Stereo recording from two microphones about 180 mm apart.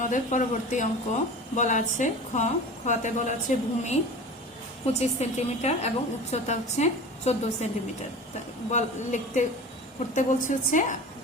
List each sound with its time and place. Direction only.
0.0 s speech: 45° left (ahead or behind)
4.9 s a woman's voice: 35° left (ahead or behind)
8.7 s a woman's voice: 40° left (ahead or behind)